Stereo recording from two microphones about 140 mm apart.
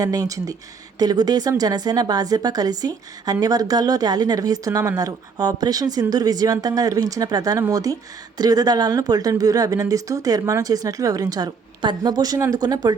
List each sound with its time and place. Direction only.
0.0 s speech: 25° right (ahead or behind)